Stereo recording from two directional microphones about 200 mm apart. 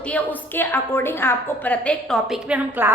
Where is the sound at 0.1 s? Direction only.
10° left (ahead or behind).